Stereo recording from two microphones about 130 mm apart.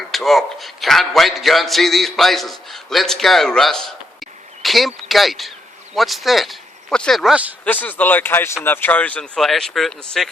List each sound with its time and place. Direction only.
0.1 s speech: centre (ahead or behind)
7.6 s speech: 15° left (ahead or behind)